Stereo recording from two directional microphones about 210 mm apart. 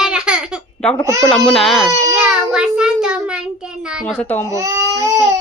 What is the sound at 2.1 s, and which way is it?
Child singing, 5° right (ahead or behind).